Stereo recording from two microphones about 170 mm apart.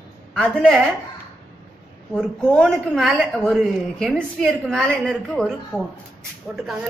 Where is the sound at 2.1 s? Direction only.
5° left (ahead or behind).